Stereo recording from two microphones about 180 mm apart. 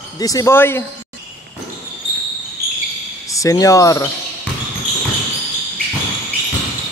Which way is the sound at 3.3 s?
20° left (ahead or behind).